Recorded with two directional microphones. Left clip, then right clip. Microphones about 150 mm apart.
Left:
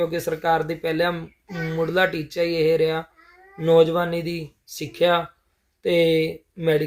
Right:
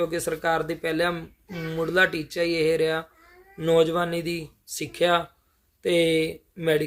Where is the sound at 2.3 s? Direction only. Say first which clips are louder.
Left 3 dB; 45° right (ahead or behind).